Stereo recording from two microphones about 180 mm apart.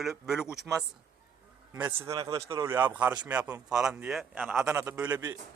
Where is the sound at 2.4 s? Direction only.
15° right (ahead or behind).